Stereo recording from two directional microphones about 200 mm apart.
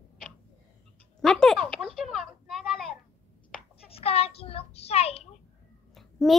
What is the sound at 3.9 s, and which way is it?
A child's voice, 30° left (ahead or behind).